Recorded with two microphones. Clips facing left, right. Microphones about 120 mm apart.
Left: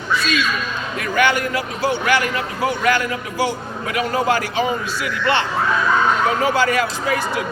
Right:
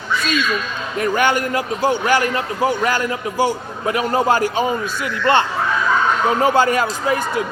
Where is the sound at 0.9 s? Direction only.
40° right (ahead or behind).